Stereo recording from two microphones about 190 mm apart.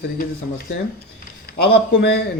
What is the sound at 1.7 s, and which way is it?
Speech, 60° left (ahead or behind).